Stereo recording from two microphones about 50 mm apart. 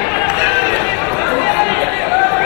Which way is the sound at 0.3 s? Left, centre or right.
Right.